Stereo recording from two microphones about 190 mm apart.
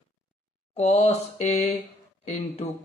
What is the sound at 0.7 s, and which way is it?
Speech, 35° left (ahead or behind).